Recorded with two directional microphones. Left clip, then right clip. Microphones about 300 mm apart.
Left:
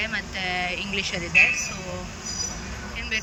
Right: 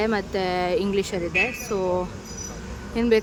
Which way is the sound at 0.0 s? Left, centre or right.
Centre.